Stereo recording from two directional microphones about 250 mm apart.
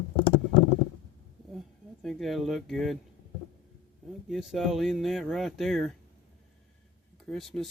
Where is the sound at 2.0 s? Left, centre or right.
Centre.